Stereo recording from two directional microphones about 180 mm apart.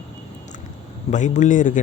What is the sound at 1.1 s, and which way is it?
Speech, 40° left (ahead or behind).